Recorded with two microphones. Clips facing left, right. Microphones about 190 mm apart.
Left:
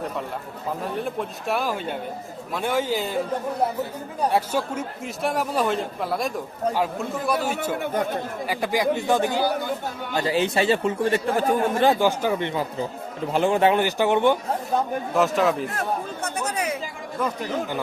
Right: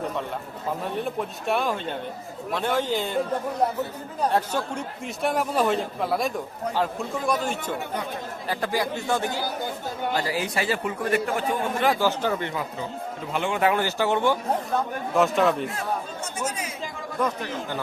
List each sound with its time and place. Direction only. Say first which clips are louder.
0.9 s speech: even; centre (ahead or behind)
4.2 s speech: left 2 dB; 10° left (ahead or behind)
7.8 s speech: left 6 dB; 45° left (ahead or behind)
8.4 s speech: left 3 dB; 15° left (ahead or behind)
11.9 s speech: left 2 dB; 15° left (ahead or behind)
13.3 s speech: left 4 dB; 35° left (ahead or behind); by 14.3 s 20° left (ahead or behind)
15.1 s speech: even; centre (ahead or behind)
15.7 s speech: left 2 dB; 55° left (ahead or behind)
17.2 s speech: left 1 dB; 10° left (ahead or behind)